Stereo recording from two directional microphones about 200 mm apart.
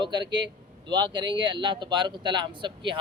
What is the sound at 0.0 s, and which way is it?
A man's voice, 20° right (ahead or behind).